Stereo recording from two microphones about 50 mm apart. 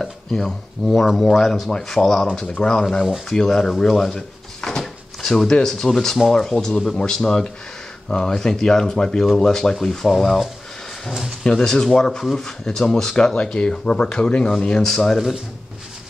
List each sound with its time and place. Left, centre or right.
0.0 s speech: centre
2.4 s speech: left
2.7 s speech: centre
4.6 s a sound: centre
5.2 s speech: centre
11.4 s speech: centre
14.9 s speech: centre